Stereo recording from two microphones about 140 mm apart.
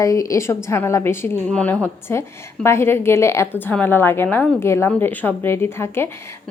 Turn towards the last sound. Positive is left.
turn(degrees=15)  # may be behind; listen again after turning